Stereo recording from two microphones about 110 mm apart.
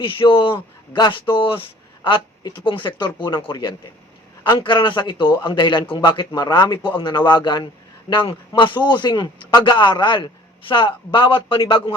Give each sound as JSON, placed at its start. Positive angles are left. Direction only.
{"t": 0.0, "sound": "a man's voice", "side_deg": 50}
{"t": 1.3, "sound": "a man's voice", "side_deg": 55}